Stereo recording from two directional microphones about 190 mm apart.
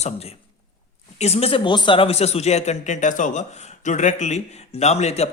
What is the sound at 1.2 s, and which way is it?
Speech, 30° left (ahead or behind).